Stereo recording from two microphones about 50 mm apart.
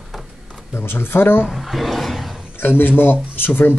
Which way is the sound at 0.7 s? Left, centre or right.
Left.